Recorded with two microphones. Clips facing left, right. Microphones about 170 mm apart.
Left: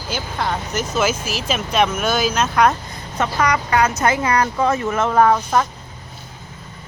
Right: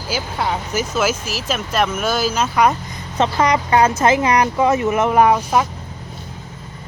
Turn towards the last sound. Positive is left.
turn(degrees=-10)  # may be behind; listen again after turning